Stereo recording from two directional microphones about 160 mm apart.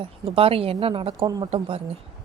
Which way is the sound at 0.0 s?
35° right (ahead or behind).